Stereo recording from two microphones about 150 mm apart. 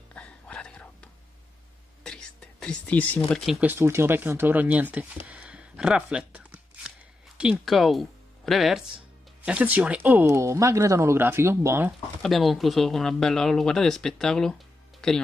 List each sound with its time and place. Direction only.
0.1 s whispering: 5° left (ahead or behind)
3.6 s speech: 15° right (ahead or behind)
12.2 s speech: centre (ahead or behind)